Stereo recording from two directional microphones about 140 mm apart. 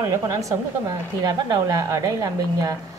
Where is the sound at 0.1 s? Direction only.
25° right (ahead or behind).